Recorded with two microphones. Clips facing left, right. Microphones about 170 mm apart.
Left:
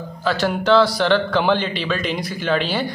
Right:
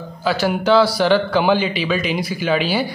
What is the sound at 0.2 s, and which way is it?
Speech, 5° right (ahead or behind).